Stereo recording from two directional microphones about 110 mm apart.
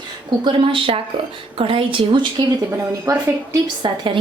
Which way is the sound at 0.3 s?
50° right (ahead or behind).